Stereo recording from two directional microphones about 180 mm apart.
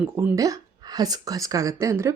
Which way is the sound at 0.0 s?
10° right (ahead or behind).